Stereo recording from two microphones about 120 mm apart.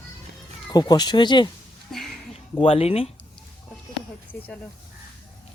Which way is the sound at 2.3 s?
50° left (ahead or behind).